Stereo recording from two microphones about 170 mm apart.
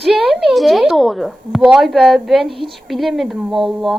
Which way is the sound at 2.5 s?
30° right (ahead or behind).